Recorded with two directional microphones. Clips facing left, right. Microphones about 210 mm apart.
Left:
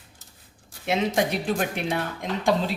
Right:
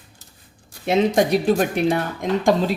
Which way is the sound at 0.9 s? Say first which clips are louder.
Right 7 dB; 40° right (ahead or behind).